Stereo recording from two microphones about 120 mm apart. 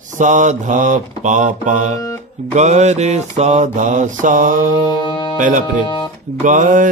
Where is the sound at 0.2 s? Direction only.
90° right.